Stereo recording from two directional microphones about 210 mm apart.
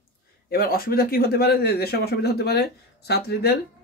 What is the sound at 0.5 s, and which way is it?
Speech, 45° left (ahead or behind).